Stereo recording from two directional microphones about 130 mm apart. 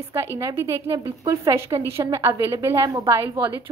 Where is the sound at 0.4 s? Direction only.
25° right (ahead or behind).